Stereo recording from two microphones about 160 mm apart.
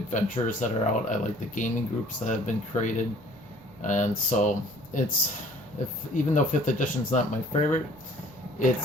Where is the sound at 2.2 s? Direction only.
50° left (ahead or behind).